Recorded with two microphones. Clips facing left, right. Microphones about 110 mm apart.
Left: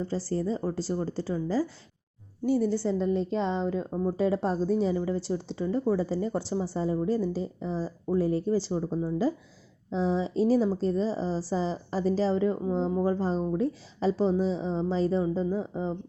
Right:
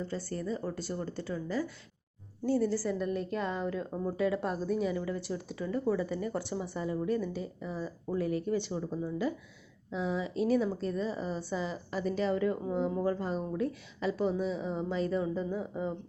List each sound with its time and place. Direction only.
0.0 s a woman's voice: 30° left (ahead or behind)
2.5 s a woman's voice: 15° left (ahead or behind)